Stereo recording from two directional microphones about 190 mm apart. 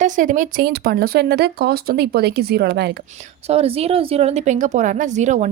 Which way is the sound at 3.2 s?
35° right (ahead or behind).